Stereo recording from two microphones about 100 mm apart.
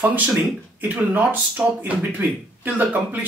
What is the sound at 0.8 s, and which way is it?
Speech, 20° right (ahead or behind).